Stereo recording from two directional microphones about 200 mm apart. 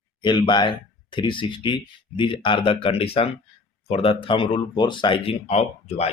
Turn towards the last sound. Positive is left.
turn(degrees=30)  # may be behind; listen again after turning